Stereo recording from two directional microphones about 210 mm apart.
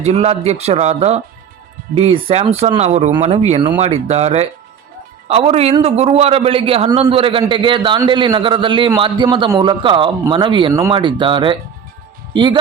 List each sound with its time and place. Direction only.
0.0 s a man's voice: 30° right (ahead or behind)